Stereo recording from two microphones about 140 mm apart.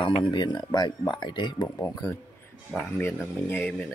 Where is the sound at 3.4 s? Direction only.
10° left (ahead or behind).